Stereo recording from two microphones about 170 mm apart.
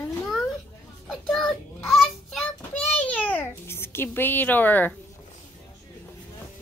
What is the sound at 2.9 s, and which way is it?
Speech, 10° left (ahead or behind).